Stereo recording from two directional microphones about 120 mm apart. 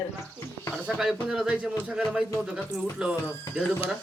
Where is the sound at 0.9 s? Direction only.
5° right (ahead or behind).